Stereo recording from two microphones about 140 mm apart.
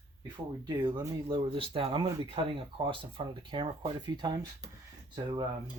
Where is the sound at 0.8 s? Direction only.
30° right (ahead or behind).